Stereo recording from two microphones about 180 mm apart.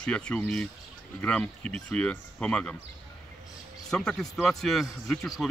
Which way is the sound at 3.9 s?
5° left (ahead or behind).